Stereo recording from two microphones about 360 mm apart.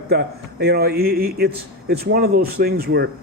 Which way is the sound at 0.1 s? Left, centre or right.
Right.